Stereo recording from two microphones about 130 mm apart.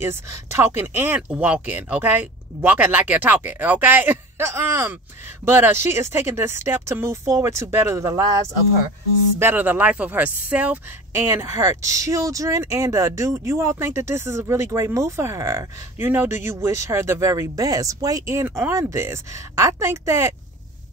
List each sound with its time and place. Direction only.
0.0 s speech: 20° right (ahead or behind)
9.4 s speech: 15° right (ahead or behind)
11.2 s speech: 20° right (ahead or behind)